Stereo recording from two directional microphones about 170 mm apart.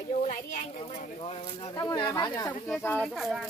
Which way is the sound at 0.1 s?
40° left (ahead or behind).